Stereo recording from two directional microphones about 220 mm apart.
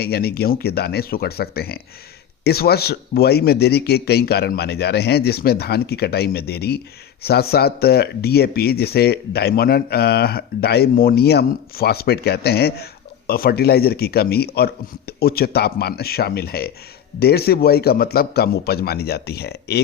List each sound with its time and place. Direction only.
0.0 s speech: 45° left (ahead or behind)